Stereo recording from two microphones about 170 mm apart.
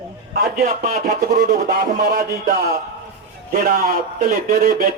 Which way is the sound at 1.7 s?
65° right (ahead or behind).